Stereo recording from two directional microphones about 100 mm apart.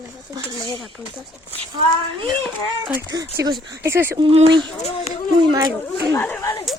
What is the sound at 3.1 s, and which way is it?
Speech, 40° right (ahead or behind).